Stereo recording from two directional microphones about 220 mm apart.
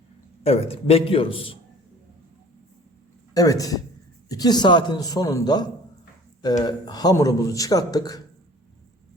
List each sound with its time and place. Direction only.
0.4 s a man's voice: 25° left (ahead or behind)
3.3 s a man's voice: 15° left (ahead or behind)